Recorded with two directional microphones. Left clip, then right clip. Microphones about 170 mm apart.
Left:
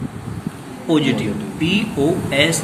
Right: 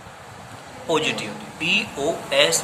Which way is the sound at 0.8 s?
30° right (ahead or behind).